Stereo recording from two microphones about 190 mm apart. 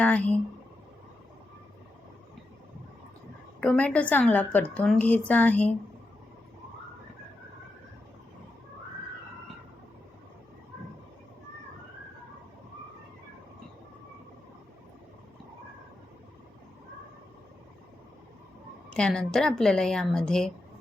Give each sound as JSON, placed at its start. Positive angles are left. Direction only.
{"t": 0.0, "sound": "a woman's voice", "side_deg": 5}
{"t": 3.6, "sound": "a woman's voice", "side_deg": 5}
{"t": 18.9, "sound": "a woman's voice", "side_deg": 5}